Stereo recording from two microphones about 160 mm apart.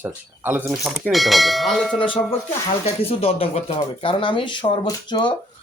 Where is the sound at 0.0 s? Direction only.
10° right (ahead or behind).